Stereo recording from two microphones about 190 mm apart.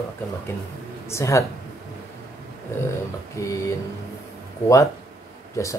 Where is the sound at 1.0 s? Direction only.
15° left (ahead or behind).